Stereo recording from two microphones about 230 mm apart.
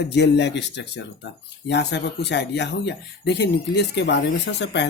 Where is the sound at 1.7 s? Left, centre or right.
Left.